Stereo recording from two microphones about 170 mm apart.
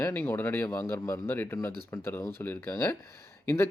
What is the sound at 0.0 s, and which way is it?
A man's voice, 10° left (ahead or behind).